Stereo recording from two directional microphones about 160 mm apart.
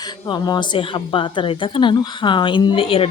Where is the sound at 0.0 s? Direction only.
25° left (ahead or behind).